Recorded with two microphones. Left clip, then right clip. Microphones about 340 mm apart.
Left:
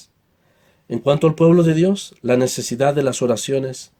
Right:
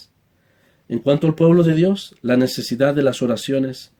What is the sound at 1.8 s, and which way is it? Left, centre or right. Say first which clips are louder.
Speech: left 1 dB; left.